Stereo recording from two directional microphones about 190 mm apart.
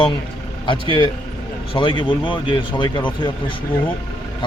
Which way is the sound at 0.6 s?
25° left (ahead or behind).